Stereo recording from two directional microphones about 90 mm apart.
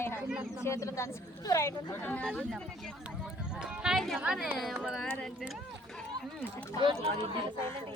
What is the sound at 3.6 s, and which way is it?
Music, 10° right (ahead or behind).